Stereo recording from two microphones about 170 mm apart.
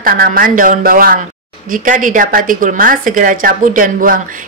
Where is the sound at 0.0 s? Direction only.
55° right (ahead or behind).